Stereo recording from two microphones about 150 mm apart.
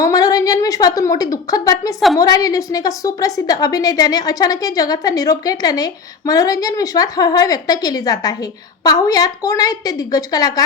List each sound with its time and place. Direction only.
0.0 s a woman's voice: 25° left (ahead or behind)